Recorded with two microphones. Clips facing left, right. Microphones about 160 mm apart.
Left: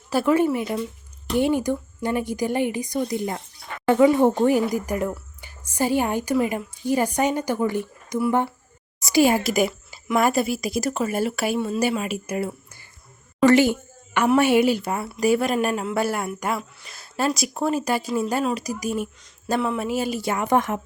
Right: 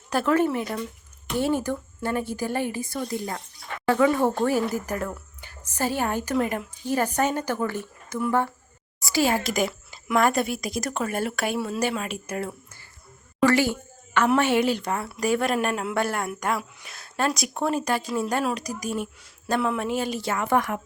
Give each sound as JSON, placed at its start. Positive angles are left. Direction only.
{"t": 0.1, "sound": "a woman's voice", "side_deg": 10}
{"t": 13.4, "sound": "a sound", "side_deg": 20}
{"t": 14.3, "sound": "a woman's voice", "side_deg": 10}